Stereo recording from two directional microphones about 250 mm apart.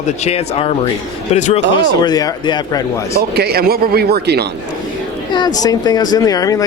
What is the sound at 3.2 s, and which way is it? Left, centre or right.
Speech, right.